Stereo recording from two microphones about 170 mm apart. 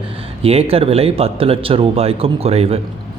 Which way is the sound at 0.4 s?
35° right (ahead or behind).